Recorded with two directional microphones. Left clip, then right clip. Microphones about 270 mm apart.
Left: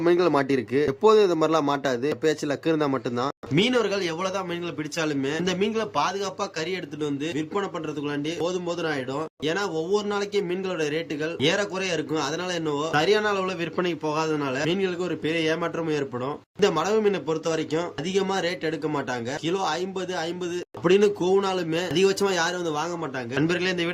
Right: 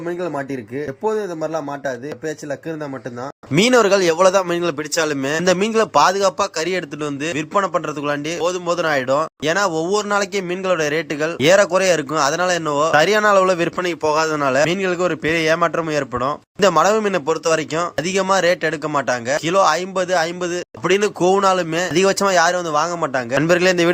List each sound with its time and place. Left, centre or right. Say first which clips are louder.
0.0 s speech: left 3 dB; centre
3.5 s speech: right 10 dB; centre